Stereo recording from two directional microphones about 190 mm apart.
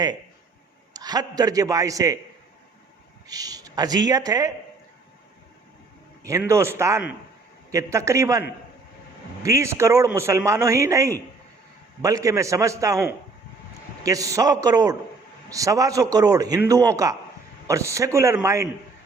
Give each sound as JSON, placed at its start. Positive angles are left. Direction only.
{"t": 0.9, "sound": "speech", "side_deg": -20}
{"t": 3.2, "sound": "speech", "side_deg": -20}
{"t": 6.5, "sound": "a man's voice", "side_deg": -15}